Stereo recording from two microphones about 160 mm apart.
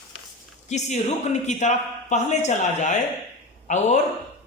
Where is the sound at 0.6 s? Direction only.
45° left (ahead or behind).